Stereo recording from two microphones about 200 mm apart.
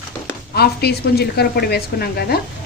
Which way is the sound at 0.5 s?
55° left (ahead or behind).